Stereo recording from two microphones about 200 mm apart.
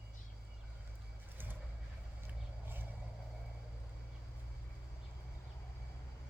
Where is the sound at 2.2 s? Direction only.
10° right (ahead or behind).